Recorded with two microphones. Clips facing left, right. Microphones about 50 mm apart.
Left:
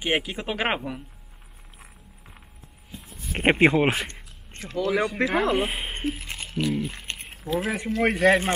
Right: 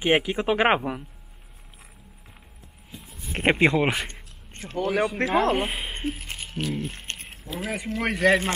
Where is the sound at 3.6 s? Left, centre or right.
Left.